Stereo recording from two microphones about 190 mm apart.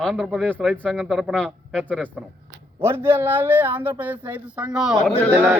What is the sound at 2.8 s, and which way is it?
Speech, 15° right (ahead or behind).